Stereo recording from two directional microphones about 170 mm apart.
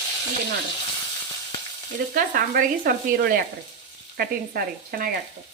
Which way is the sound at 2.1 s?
55° right (ahead or behind).